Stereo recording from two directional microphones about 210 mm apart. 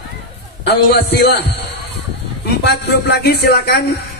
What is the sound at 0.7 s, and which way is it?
Speech, 50° left (ahead or behind).